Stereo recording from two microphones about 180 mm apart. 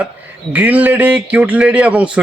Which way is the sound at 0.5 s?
10° right (ahead or behind).